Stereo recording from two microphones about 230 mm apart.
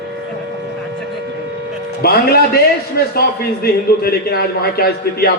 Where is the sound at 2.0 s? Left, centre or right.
Left.